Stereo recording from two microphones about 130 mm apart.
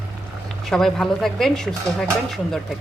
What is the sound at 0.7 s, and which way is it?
Speech, 5° left (ahead or behind).